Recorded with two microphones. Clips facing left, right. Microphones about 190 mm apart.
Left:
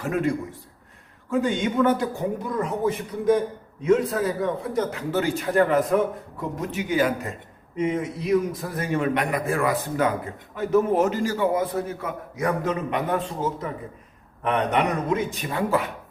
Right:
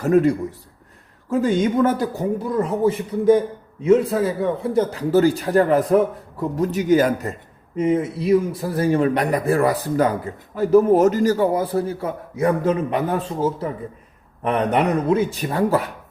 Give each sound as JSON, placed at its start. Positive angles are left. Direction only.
{"t": 0.0, "sound": "a man's voice", "side_deg": -40}
{"t": 1.3, "sound": "a man's voice", "side_deg": -40}
{"t": 2.6, "sound": "a man's voice", "side_deg": -30}